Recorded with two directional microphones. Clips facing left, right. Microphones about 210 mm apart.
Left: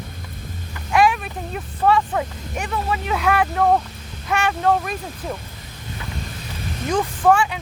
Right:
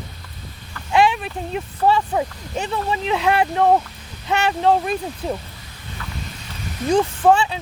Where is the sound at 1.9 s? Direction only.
25° right (ahead or behind).